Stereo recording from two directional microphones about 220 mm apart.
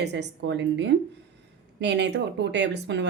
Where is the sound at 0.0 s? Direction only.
50° right (ahead or behind).